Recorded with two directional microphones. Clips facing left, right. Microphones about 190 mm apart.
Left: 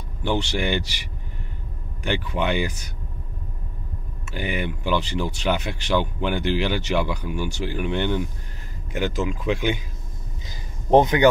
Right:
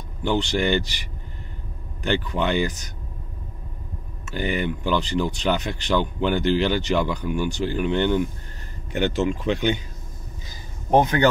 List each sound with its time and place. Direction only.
0.3 s speech: 10° left (ahead or behind)
2.0 s speech: 10° left (ahead or behind)
4.3 s speech: 10° left (ahead or behind)
10.9 s speech: 20° left (ahead or behind)